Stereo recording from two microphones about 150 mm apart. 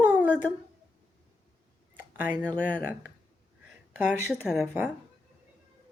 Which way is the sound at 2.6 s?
10° right (ahead or behind).